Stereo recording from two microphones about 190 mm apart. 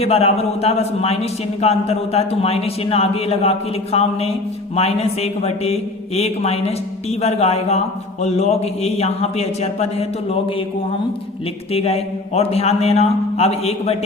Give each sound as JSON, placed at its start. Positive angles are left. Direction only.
{"t": 0.0, "sound": "a man's voice", "side_deg": 30}
{"t": 11.7, "sound": "a man's voice", "side_deg": 30}